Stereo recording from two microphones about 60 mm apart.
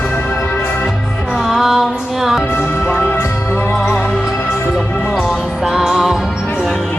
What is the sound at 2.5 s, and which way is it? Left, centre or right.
Music, left.